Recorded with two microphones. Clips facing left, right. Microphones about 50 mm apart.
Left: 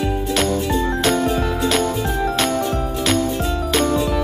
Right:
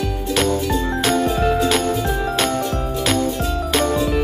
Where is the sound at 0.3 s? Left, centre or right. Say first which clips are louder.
Right 2 dB; centre.